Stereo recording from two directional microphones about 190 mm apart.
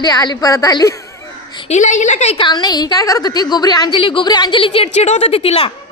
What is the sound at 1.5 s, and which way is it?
A woman's voice, 35° left (ahead or behind).